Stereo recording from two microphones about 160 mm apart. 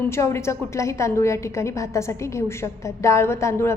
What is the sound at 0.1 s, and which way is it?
A woman's voice, 15° left (ahead or behind).